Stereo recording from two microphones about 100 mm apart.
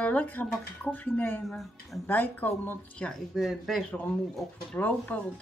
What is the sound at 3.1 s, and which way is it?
Speech, centre (ahead or behind).